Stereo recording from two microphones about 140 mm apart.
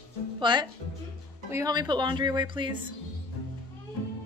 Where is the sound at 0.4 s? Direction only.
35° right (ahead or behind).